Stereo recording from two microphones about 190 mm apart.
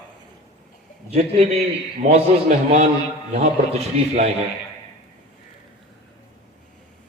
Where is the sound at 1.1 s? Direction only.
35° right (ahead or behind).